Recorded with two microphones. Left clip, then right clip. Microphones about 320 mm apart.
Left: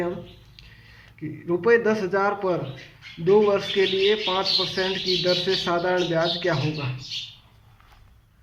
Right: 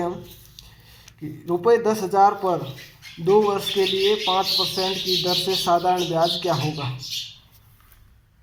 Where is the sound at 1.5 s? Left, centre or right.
Centre.